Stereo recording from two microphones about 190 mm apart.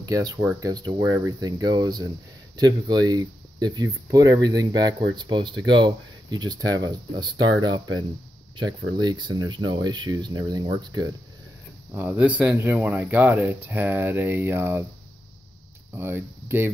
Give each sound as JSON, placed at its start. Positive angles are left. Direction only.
{"t": 0.0, "sound": "speech", "side_deg": -20}
{"t": 8.9, "sound": "speech", "side_deg": -20}
{"t": 16.0, "sound": "speech", "side_deg": -10}